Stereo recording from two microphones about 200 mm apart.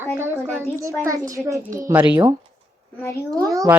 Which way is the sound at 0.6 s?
15° right (ahead or behind).